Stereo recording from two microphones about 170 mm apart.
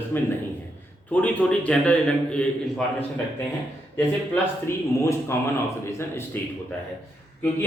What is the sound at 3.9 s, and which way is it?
Speech, 15° left (ahead or behind).